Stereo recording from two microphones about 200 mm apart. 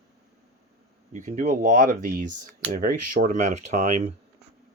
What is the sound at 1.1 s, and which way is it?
Speech, 35° right (ahead or behind).